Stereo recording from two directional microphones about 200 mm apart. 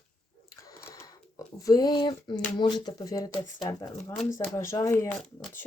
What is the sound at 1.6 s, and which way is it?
Speech, 20° left (ahead or behind).